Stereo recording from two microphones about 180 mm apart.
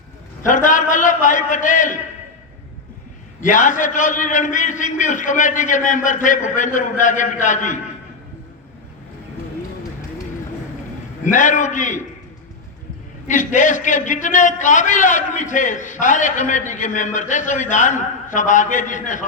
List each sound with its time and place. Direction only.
0.4 s a man's voice: 45° left (ahead or behind)
3.4 s a man's voice: 45° left (ahead or behind)
11.2 s a man's voice: 45° left (ahead or behind)
13.2 s a man's voice: 45° left (ahead or behind)